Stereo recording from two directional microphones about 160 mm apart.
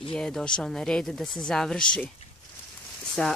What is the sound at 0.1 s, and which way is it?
Speech, 5° left (ahead or behind).